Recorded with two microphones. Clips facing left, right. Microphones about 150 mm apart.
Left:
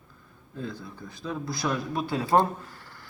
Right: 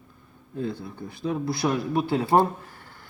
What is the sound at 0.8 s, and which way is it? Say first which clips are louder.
Speech: right 6 dB; 25° right (ahead or behind).